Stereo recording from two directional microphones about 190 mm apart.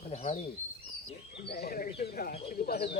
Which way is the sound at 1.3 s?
60° left (ahead or behind).